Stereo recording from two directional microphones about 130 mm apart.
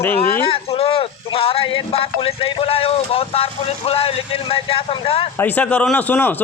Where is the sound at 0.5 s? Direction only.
50° left (ahead or behind).